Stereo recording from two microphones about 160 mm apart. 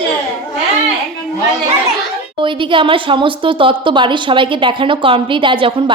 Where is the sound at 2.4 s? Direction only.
30° right (ahead or behind).